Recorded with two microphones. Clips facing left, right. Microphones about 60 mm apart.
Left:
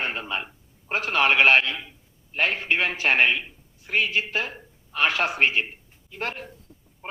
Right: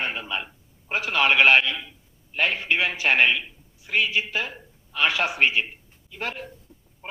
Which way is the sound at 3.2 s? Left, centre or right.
Centre.